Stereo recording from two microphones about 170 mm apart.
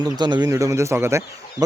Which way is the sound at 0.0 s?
25° right (ahead or behind).